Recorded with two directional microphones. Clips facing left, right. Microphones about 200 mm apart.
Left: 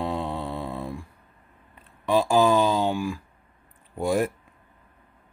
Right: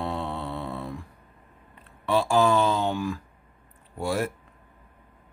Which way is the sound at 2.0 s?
15° left (ahead or behind).